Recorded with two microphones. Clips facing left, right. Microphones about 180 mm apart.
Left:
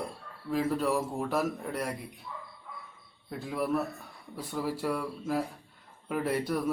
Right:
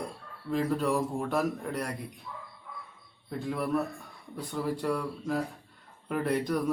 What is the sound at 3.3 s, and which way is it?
A man's voice, 5° left (ahead or behind).